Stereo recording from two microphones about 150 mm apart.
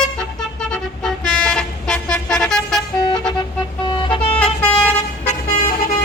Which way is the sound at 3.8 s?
30° left (ahead or behind).